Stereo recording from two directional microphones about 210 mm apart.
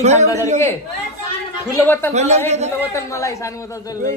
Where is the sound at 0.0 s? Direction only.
30° right (ahead or behind).